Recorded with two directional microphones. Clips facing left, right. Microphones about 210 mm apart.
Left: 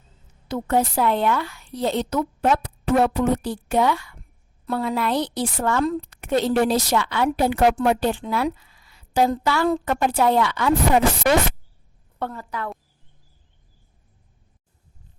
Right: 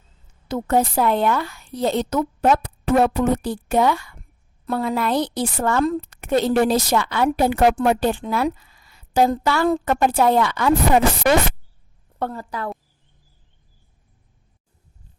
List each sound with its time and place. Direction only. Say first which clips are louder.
0.4 s a woman's voice: right 2 dB; 45° right (ahead or behind)
12.2 s a woman's voice: right 3 dB; 35° right (ahead or behind)